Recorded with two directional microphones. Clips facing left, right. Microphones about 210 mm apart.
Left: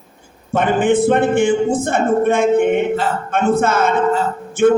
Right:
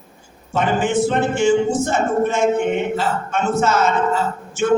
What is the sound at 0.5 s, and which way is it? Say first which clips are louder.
A man's voice: left 4 dB; 55° left (ahead or behind).